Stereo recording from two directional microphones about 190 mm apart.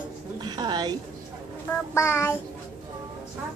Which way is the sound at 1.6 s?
15° left (ahead or behind).